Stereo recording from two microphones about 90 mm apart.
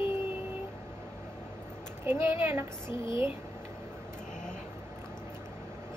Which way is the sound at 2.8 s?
65° left (ahead or behind).